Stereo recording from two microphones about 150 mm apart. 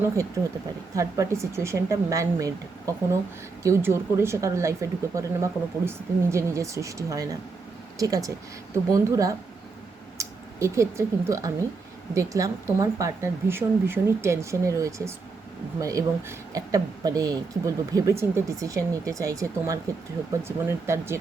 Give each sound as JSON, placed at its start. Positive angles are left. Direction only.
{"t": 0.9, "sound": "speech", "side_deg": -20}